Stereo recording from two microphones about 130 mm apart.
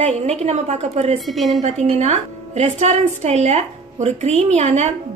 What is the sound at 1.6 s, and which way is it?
A woman's voice, 60° right (ahead or behind).